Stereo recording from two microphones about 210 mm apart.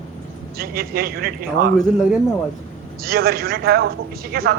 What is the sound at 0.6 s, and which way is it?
A man's voice, 45° right (ahead or behind).